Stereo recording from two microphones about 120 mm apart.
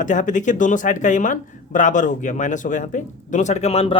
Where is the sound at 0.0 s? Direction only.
90° left.